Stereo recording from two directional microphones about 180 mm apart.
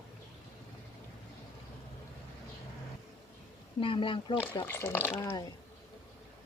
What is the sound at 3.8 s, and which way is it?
Speech, 30° left (ahead or behind).